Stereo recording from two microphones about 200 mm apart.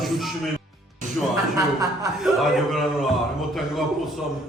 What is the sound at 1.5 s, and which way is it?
Speech, 15° right (ahead or behind).